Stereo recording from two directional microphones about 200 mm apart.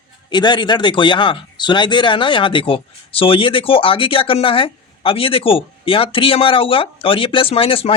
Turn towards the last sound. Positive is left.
turn(degrees=30)  # may be behind; listen again after turning